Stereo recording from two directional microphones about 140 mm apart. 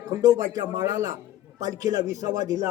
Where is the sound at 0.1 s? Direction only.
25° right (ahead or behind).